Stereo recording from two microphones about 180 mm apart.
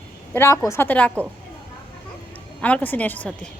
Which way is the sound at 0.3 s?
15° left (ahead or behind).